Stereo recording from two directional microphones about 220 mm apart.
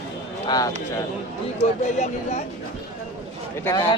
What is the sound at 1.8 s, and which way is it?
Speech, 30° left (ahead or behind).